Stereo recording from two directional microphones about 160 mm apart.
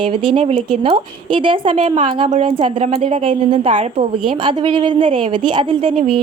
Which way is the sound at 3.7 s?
50° right (ahead or behind).